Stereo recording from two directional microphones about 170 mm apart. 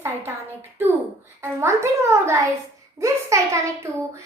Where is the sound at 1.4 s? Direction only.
15° right (ahead or behind).